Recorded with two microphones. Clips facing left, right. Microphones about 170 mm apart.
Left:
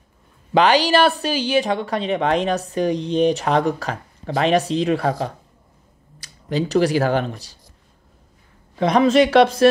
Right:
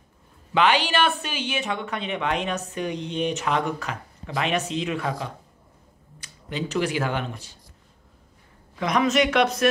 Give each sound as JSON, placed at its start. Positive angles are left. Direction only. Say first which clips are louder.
{"t": 0.5, "sound": "speech", "louder": "left 6 dB", "side_deg": 35}
{"t": 6.1, "sound": "speech", "louder": "left 8 dB", "side_deg": 35}
{"t": 8.7, "sound": "speech", "louder": "left 7 dB", "side_deg": 30}